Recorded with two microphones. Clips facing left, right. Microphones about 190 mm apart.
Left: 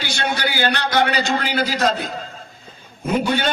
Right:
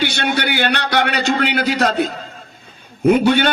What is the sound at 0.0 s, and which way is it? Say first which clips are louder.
A man's voice: right 4 dB; 65° right (ahead or behind).